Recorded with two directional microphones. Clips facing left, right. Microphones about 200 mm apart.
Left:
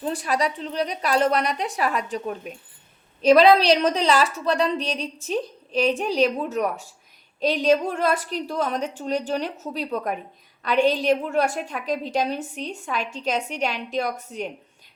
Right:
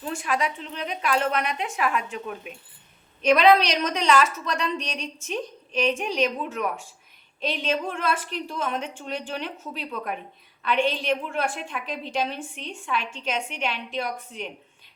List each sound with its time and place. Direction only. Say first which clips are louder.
0.0 s a woman's voice: left 3 dB; 35° left (ahead or behind)